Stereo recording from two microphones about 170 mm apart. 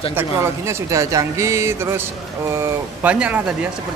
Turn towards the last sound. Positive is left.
turn(degrees=-5)  # may be behind; listen again after turning